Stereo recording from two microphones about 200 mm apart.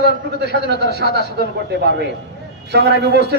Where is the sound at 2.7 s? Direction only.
55° right (ahead or behind).